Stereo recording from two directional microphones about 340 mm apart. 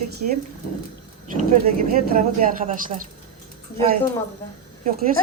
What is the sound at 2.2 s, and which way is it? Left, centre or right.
Speech, right.